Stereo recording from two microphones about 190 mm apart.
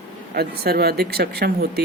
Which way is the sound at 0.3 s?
55° right (ahead or behind).